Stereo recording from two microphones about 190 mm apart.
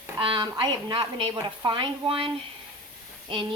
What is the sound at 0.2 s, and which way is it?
A woman's voice, 25° right (ahead or behind).